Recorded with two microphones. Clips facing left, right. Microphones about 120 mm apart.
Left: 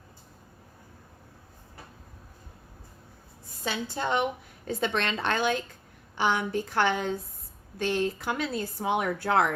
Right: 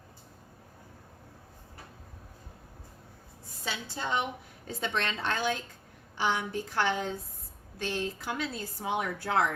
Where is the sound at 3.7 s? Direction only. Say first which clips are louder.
Left 5 dB; 55° left (ahead or behind).